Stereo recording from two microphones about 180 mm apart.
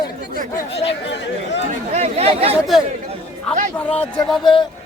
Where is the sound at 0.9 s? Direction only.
80° left.